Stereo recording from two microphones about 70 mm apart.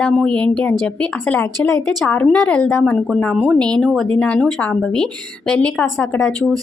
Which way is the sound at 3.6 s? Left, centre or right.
Centre.